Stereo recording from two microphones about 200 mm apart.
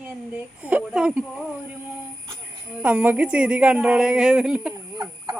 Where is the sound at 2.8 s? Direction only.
10° right (ahead or behind).